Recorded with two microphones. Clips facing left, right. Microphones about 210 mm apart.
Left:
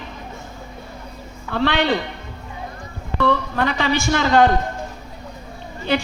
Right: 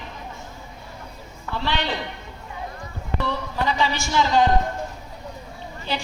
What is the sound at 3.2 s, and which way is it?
A woman's voice, 60° left (ahead or behind).